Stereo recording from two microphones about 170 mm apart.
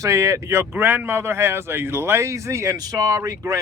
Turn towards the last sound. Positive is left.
turn(degrees=-20)  # may be behind; listen again after turning